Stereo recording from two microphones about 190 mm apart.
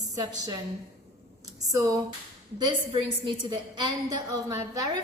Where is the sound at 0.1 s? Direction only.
20° right (ahead or behind).